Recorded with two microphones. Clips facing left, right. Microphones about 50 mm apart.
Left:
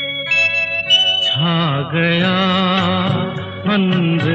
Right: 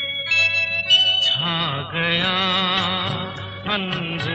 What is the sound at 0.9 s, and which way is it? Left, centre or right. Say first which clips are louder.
Music: left 2 dB; centre.